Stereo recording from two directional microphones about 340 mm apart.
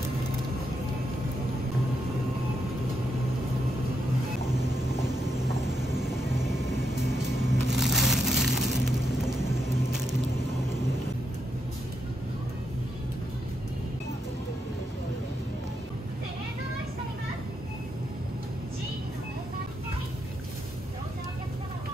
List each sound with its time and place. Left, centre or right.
4.6 s vehicle: centre
7.6 s crushing: centre